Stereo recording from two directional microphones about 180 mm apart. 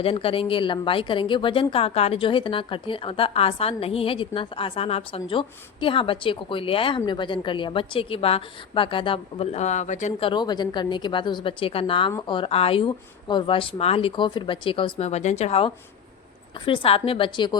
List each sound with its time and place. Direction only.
0.0 s a woman's voice: 30° left (ahead or behind)
10.2 s a woman's voice: 25° left (ahead or behind)